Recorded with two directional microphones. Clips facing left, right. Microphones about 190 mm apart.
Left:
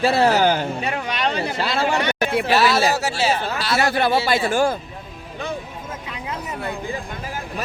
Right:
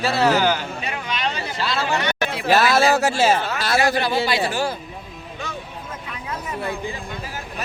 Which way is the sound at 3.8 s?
55° left (ahead or behind).